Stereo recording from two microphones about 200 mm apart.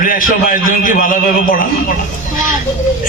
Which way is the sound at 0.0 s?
45° left (ahead or behind).